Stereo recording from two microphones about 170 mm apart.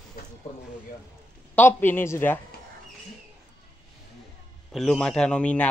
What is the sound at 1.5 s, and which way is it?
Speech, 10° left (ahead or behind).